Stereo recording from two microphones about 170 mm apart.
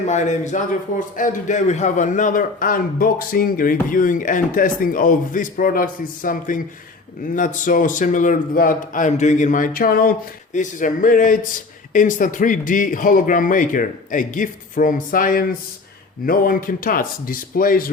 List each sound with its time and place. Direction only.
0.0 s a man's voice: 45° left (ahead or behind)